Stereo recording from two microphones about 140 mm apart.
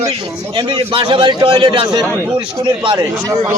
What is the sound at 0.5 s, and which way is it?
A man's voice, 35° right (ahead or behind).